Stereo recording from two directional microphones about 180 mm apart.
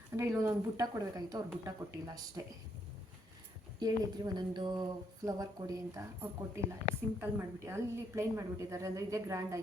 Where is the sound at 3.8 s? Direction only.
20° right (ahead or behind).